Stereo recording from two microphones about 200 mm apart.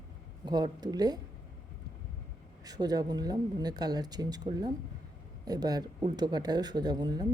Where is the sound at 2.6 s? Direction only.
20° right (ahead or behind).